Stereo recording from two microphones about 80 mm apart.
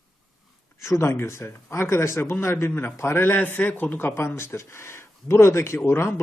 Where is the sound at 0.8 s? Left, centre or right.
Left.